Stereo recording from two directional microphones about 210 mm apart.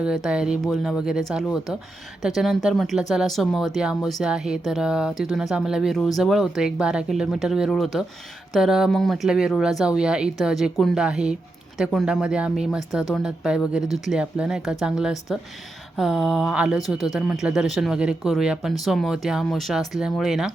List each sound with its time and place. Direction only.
0.0 s speech: 5° right (ahead or behind)